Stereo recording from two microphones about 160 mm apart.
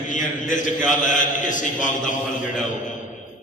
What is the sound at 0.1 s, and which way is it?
A man's voice, 55° left (ahead or behind).